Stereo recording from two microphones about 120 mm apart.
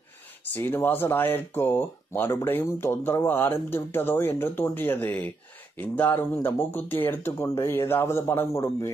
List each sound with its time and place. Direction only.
0.6 s speech: 20° left (ahead or behind)